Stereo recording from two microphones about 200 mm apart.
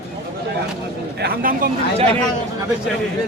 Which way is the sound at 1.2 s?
45° right (ahead or behind).